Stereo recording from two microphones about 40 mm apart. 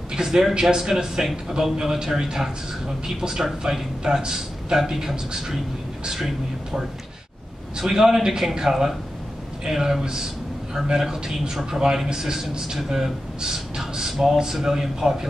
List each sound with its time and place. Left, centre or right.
0.1 s a man's voice: centre
4.0 s a man's voice: centre